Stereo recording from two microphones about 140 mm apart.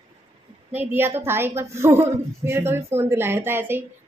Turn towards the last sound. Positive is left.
turn(degrees=-15)  # may be behind; listen again after turning